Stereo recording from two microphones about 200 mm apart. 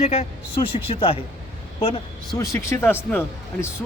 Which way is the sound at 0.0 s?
30° left (ahead or behind).